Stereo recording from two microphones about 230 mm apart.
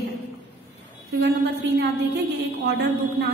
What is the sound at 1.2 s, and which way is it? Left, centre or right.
A woman's voice, right.